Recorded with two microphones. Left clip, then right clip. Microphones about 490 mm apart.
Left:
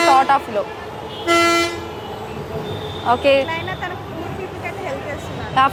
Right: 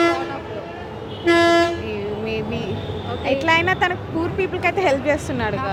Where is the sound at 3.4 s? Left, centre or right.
Right.